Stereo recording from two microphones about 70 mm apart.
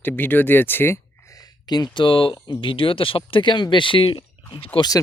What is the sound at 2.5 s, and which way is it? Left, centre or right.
Speech, left.